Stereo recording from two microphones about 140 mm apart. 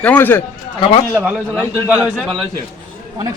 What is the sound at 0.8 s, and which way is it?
Speech, 45° left (ahead or behind).